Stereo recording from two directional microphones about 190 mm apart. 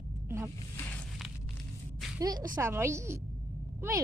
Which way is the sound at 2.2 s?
20° right (ahead or behind).